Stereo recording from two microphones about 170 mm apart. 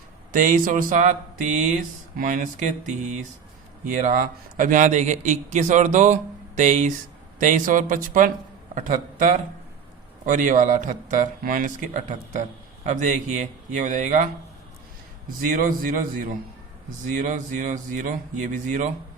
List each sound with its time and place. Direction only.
0.3 s a man's voice: 50° right (ahead or behind)
15.4 s speech: 55° right (ahead or behind)